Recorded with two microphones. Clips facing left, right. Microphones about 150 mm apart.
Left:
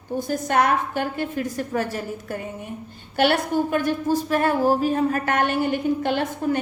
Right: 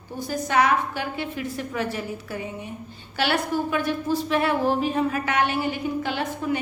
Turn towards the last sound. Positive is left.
turn(degrees=50)  # may be behind; listen again after turning